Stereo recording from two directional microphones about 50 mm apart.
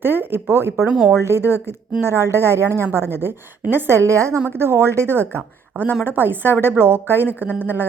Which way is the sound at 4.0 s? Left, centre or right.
Right.